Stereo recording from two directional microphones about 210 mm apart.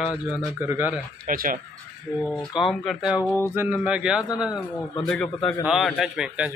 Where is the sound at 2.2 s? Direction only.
Centre (ahead or behind).